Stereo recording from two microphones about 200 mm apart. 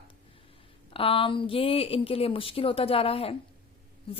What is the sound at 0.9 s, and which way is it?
Speech, 25° left (ahead or behind).